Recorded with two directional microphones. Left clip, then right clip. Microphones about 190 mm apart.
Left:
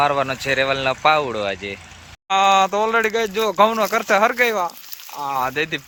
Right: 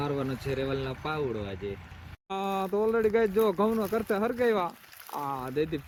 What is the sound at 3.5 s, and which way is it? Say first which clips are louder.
Speech: left 12 dB; 65° left (ahead or behind).